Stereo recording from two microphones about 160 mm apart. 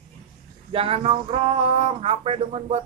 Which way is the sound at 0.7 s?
35° right (ahead or behind).